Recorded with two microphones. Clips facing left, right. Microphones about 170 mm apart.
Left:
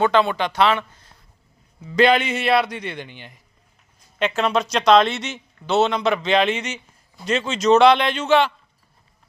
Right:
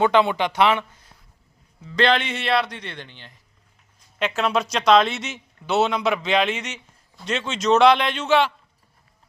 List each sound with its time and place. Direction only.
0.0 s a man's voice: 15° right (ahead or behind)
1.8 s a man's voice: 10° left (ahead or behind)
4.2 s a man's voice: 5° right (ahead or behind)